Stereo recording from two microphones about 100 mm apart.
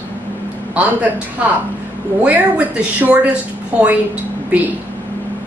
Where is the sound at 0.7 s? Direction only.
15° right (ahead or behind).